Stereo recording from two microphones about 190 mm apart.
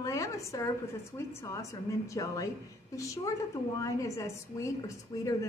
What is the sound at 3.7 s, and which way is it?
A woman's voice, 15° left (ahead or behind).